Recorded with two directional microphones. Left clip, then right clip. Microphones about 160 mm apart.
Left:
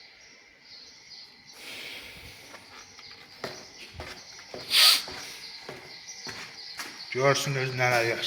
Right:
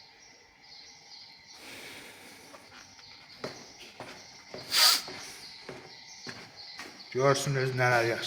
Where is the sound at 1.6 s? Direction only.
25° right (ahead or behind).